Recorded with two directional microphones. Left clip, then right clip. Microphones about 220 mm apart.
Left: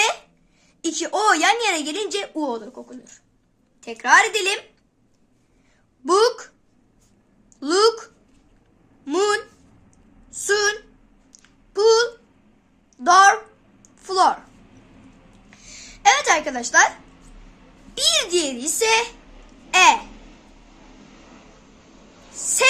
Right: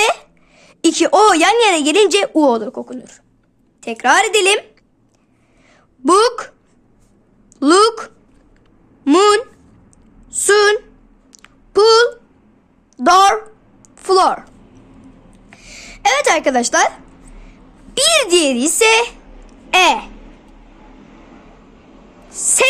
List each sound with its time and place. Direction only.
0.0 s speech: 45° right (ahead or behind)
6.1 s a woman's voice: 40° right (ahead or behind)
7.6 s a woman's voice: 40° right (ahead or behind)
11.3 s a sound: 45° right (ahead or behind)
13.0 s a child's voice: 45° right (ahead or behind)
15.4 s a sound: 45° right (ahead or behind)
17.9 s a woman's voice: 45° right (ahead or behind)
22.4 s speech: 40° right (ahead or behind)